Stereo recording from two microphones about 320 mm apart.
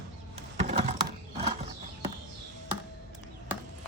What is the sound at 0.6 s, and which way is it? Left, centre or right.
Computer keyboard, right.